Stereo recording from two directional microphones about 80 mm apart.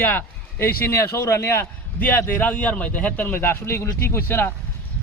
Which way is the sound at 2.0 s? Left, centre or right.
Left.